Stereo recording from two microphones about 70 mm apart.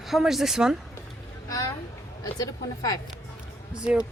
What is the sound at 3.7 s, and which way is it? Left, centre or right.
Speech, centre.